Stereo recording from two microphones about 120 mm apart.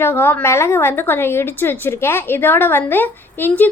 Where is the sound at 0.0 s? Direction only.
20° left (ahead or behind).